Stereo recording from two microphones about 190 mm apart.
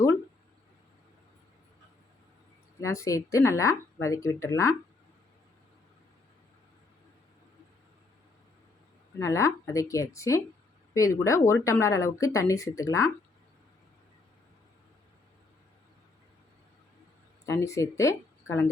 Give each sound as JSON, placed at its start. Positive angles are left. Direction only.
{"t": 2.8, "sound": "speech", "side_deg": 15}
{"t": 9.1, "sound": "speech", "side_deg": 15}
{"t": 17.4, "sound": "speech", "side_deg": 15}